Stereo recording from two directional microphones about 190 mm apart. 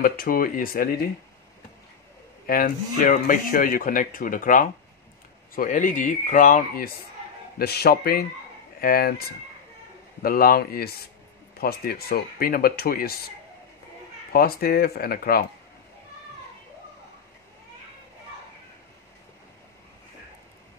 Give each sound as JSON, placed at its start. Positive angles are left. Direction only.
{"t": 0.0, "sound": "speech", "side_deg": 50}
{"t": 2.4, "sound": "speech", "side_deg": 45}
{"t": 10.2, "sound": "speech", "side_deg": 50}
{"t": 14.3, "sound": "speech", "side_deg": 55}